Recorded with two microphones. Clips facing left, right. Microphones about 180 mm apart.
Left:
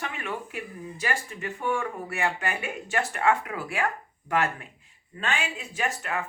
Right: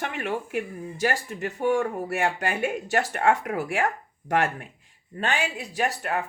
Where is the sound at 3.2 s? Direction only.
45° right (ahead or behind).